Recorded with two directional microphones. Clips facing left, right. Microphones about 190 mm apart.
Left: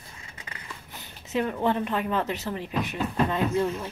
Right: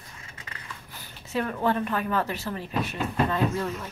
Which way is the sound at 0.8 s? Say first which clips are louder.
Left 1 dB; 20° left (ahead or behind).